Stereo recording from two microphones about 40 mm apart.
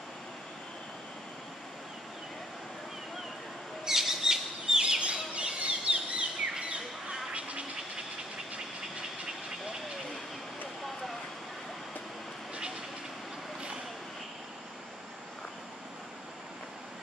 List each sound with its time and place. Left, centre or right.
3.8 s bird: centre
5.3 s a sound: right
7.3 s vehicle: right